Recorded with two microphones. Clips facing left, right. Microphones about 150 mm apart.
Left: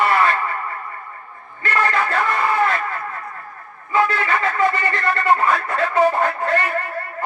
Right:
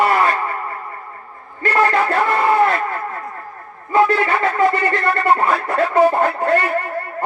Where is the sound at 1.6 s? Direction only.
35° right (ahead or behind).